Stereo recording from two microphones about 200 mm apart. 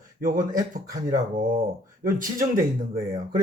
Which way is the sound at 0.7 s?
40° right (ahead or behind).